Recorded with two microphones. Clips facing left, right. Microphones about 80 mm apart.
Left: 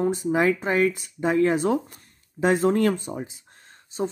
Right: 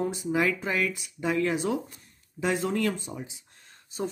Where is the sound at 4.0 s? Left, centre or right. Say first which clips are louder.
Left 5 dB; left.